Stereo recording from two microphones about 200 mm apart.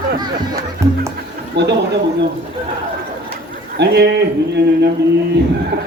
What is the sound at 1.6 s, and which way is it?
Speech, 55° right (ahead or behind).